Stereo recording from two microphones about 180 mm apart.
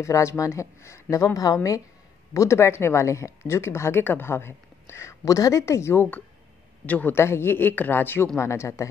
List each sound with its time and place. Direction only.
0.0 s speech: 15° left (ahead or behind)